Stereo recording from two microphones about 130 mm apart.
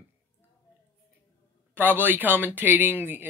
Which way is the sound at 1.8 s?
15° right (ahead or behind).